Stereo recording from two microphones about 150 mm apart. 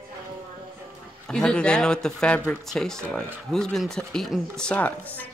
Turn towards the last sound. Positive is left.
turn(degrees=10)  # may be behind; listen again after turning